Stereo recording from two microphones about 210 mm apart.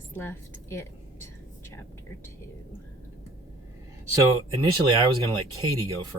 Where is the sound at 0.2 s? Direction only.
10° left (ahead or behind).